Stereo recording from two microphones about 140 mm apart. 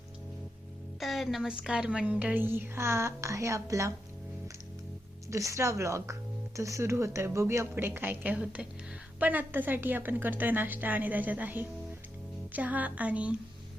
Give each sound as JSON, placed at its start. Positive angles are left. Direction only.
{"t": 0.9, "sound": "a woman's voice", "side_deg": 0}
{"t": 5.3, "sound": "a woman's voice", "side_deg": -20}